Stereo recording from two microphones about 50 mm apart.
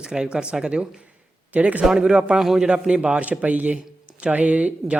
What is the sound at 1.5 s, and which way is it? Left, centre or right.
Speech, right.